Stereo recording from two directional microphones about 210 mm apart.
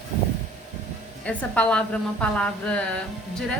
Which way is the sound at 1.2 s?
5° left (ahead or behind).